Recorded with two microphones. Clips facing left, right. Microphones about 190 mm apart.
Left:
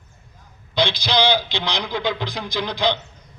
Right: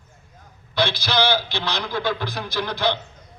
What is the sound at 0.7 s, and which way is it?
A man's voice, 15° left (ahead or behind).